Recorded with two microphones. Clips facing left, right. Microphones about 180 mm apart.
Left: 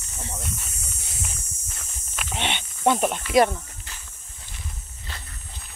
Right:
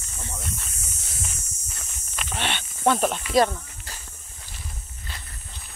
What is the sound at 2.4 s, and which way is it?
Snake, 20° left (ahead or behind).